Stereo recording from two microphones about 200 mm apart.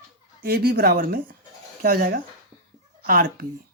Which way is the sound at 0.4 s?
50° right (ahead or behind).